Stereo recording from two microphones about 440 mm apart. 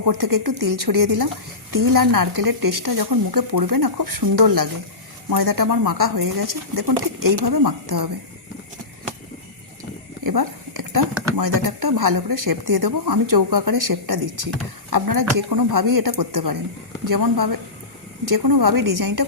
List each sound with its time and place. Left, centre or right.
0.0 s speech: right
10.2 s a sound: right
11.3 s speech: right